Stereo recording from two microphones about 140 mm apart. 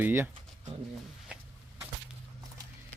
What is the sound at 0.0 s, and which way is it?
Speech, 15° right (ahead or behind).